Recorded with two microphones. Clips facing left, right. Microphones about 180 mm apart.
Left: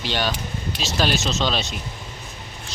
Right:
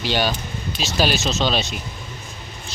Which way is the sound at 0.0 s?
5° right (ahead or behind).